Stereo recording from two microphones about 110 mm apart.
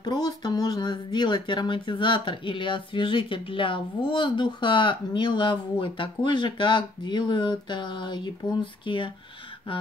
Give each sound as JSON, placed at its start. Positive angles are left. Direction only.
{"t": 0.0, "sound": "speech", "side_deg": 40}